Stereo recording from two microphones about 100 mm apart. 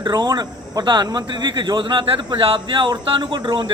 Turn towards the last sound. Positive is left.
turn(degrees=-50)  # may be behind; listen again after turning